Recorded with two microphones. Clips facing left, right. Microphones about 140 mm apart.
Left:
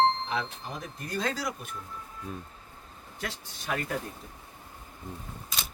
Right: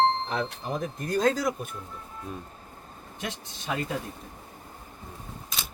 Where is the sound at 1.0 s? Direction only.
45° right (ahead or behind).